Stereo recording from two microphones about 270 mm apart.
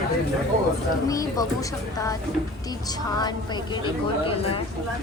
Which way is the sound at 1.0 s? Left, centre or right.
Centre.